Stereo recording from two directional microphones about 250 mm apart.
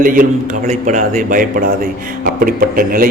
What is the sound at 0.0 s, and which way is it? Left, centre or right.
A man's voice, right.